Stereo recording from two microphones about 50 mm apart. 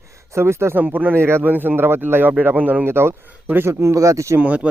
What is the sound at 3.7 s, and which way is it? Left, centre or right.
Speech, right.